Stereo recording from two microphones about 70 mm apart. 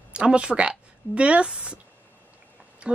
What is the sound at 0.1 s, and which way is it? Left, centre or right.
Speech, centre.